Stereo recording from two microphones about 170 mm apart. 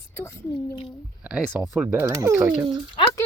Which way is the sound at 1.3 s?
5° right (ahead or behind).